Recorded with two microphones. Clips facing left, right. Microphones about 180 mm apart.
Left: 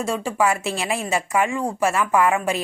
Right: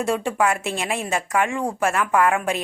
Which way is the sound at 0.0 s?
Centre (ahead or behind).